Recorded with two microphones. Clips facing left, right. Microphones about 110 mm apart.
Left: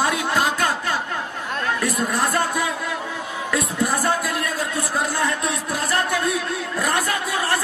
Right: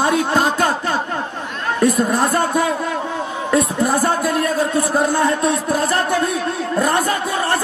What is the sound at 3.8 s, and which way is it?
A man's voice, 20° right (ahead or behind).